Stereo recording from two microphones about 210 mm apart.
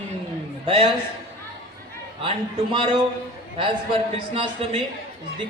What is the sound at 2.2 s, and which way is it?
A man's voice, 25° right (ahead or behind).